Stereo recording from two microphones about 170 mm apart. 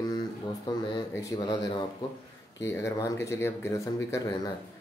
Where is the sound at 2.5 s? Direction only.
15° left (ahead or behind).